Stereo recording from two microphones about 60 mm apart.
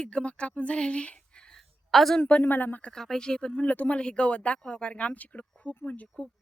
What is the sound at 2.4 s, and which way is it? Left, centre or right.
Speech, left.